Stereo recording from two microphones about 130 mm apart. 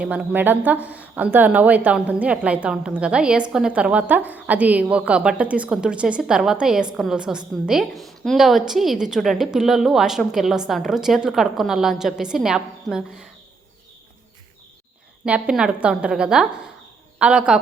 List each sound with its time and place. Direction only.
0.0 s a woman's voice: 10° right (ahead or behind)
15.2 s a woman's voice: 5° right (ahead or behind)